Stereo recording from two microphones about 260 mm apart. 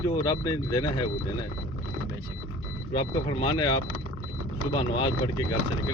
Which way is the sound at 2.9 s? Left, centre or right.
Centre.